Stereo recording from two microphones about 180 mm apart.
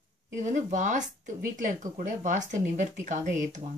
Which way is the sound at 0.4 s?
40° right (ahead or behind).